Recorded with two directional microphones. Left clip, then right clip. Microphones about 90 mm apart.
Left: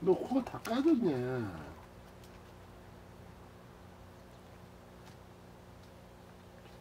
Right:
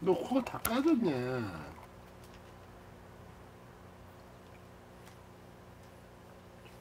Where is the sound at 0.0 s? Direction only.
20° right (ahead or behind).